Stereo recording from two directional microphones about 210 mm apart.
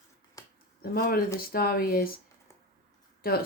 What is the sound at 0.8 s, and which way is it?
Speech, 45° left (ahead or behind).